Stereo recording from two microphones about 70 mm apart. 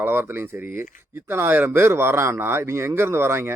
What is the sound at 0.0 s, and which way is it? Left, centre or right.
Speech, right.